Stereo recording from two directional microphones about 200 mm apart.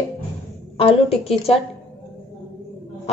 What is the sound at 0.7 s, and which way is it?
Speech, 30° left (ahead or behind).